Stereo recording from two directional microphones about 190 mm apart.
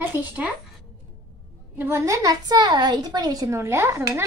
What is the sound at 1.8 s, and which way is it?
A woman's voice, 15° right (ahead or behind).